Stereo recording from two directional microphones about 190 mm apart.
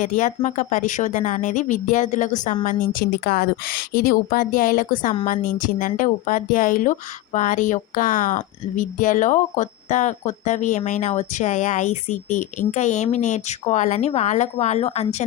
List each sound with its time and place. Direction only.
0.0 s a woman's voice: 40° left (ahead or behind)